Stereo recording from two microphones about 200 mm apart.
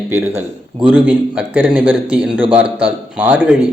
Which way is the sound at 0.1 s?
10° right (ahead or behind).